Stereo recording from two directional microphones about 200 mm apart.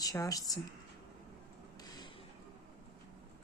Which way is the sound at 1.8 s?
20° left (ahead or behind).